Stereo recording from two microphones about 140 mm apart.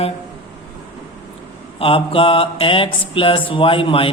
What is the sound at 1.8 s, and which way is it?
Mantra, 40° left (ahead or behind).